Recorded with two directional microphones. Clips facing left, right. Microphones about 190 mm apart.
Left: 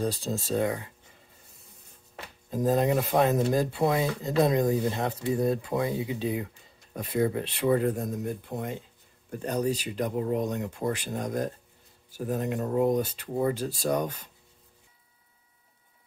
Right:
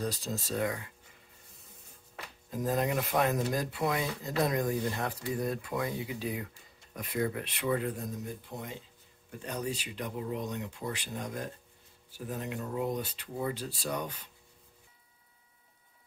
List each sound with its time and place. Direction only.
0.0 s speech: 30° left (ahead or behind)
2.1 s speech: 30° left (ahead or behind); by 8.7 s 55° left (ahead or behind)
9.3 s speech: 45° left (ahead or behind)